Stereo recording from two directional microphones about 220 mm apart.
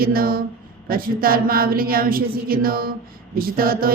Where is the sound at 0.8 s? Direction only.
40° right (ahead or behind).